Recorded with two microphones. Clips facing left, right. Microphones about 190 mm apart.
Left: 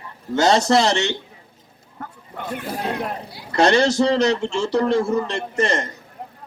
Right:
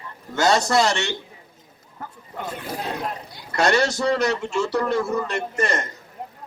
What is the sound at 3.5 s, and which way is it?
A man's voice, 30° left (ahead or behind).